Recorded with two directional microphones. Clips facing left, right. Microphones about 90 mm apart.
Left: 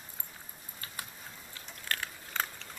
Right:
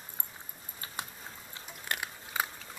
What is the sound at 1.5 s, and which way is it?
Biting, 15° right (ahead or behind).